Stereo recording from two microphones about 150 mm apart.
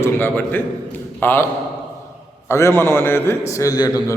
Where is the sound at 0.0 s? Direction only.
15° left (ahead or behind).